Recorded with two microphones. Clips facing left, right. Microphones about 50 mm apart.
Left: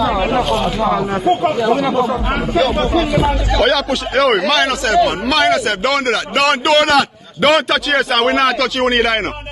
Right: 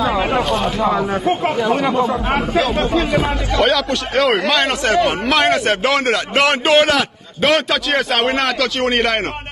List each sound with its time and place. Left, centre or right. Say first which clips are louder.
0.0 s music: left 1 dB; centre
2.0 s a man's voice: even; right
3.6 s a man's voice: left 1 dB; centre
4.6 s a man's voice: left 2 dB; right
7.4 s a man's voice: left 3 dB; centre